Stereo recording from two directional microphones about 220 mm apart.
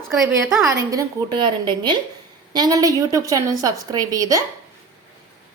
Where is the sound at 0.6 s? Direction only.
15° right (ahead or behind).